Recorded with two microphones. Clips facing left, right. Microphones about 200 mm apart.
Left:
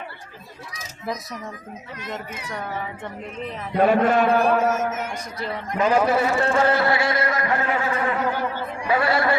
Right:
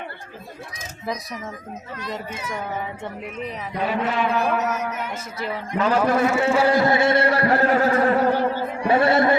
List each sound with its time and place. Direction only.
3.8 s a man's voice: 50° left (ahead or behind)
5.8 s a man's voice: 10° left (ahead or behind); by 8.5 s 35° right (ahead or behind)
8.9 s a man's voice: 25° right (ahead or behind)